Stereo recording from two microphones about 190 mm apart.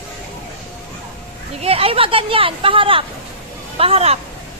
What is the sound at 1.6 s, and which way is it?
A woman's voice, 30° right (ahead or behind).